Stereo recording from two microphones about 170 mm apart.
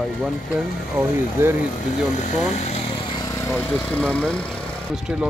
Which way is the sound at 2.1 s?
45° left (ahead or behind).